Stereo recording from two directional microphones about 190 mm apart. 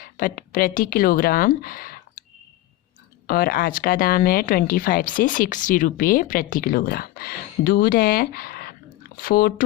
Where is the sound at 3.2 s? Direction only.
50° left (ahead or behind).